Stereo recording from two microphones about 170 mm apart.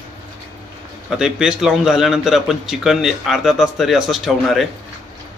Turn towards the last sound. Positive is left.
turn(degrees=0)  # may be behind; listen again after turning